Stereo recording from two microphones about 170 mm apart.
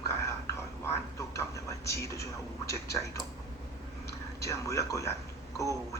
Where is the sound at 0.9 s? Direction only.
15° left (ahead or behind).